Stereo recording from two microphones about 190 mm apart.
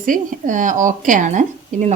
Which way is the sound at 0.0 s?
45° right (ahead or behind).